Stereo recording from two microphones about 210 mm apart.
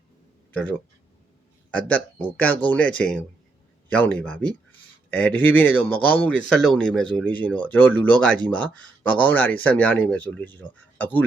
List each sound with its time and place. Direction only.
0.5 s speech: 5° left (ahead or behind)